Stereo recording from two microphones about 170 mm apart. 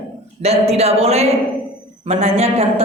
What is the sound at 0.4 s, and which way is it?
A man's voice, 40° right (ahead or behind).